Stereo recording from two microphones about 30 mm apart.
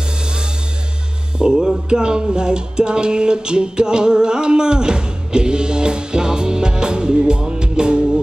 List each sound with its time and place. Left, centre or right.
1.5 s music: centre
1.9 s music: right